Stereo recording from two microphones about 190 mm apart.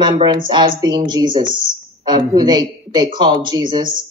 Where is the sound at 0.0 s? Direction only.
25° right (ahead or behind).